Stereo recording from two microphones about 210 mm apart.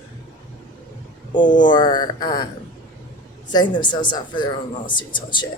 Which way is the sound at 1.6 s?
20° left (ahead or behind).